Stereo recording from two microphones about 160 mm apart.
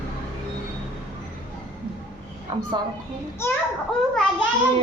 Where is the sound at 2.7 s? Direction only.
30° right (ahead or behind).